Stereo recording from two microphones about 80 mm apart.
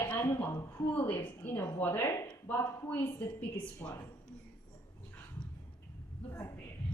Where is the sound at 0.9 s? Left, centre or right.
Left.